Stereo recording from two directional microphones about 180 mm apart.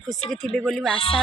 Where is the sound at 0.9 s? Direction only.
30° left (ahead or behind).